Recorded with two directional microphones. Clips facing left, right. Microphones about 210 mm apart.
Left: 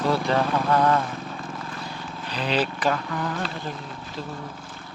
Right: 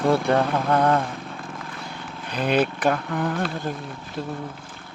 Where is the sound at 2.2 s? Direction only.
50° right (ahead or behind).